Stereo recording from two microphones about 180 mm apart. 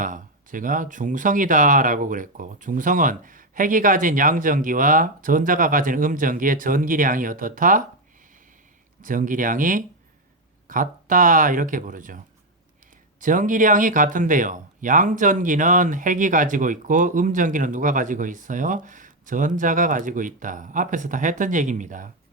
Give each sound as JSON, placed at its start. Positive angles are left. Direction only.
{"t": 0.0, "sound": "speech", "side_deg": -45}
{"t": 9.0, "sound": "speech", "side_deg": -45}